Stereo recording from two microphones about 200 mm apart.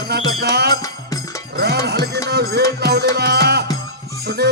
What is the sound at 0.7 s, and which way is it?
Music, 20° left (ahead or behind).